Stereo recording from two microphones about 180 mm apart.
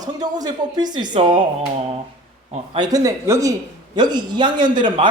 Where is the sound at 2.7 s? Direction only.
20° right (ahead or behind).